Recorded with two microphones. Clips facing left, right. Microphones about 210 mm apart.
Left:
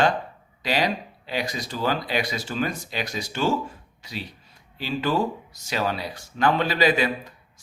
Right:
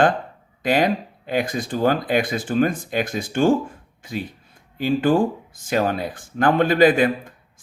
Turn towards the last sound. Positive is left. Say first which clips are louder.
# right 5 dB
turn(degrees=-50)  # may be behind; listen again after turning